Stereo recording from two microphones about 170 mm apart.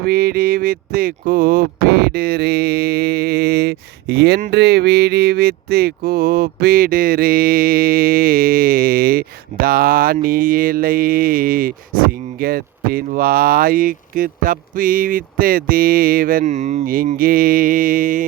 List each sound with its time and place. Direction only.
0.0 s mantra: 65° right (ahead or behind)